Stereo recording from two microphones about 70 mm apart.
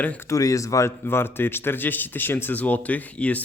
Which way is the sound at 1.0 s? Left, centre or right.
Left.